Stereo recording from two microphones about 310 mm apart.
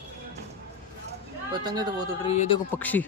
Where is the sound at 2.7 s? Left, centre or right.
Centre.